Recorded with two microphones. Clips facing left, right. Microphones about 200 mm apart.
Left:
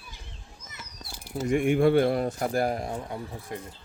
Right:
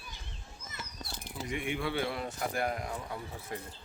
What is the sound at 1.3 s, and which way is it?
Speech, 45° left (ahead or behind).